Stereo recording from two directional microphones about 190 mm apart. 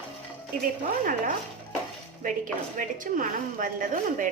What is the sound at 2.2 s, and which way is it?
A woman's voice, 45° right (ahead or behind).